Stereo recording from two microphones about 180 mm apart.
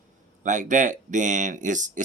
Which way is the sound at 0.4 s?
45° right (ahead or behind).